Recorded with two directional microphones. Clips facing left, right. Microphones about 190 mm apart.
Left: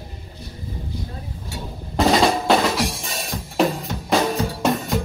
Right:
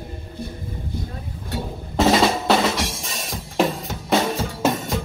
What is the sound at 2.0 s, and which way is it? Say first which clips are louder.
Drum: even; centre (ahead or behind).